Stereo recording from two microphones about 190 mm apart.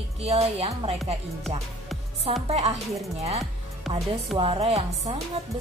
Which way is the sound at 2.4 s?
35° right (ahead or behind).